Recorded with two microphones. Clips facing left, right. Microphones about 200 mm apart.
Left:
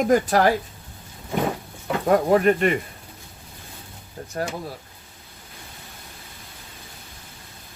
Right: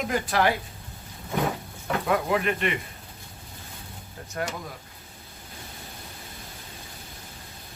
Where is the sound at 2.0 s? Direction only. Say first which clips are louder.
Left 8 dB; 45° left (ahead or behind).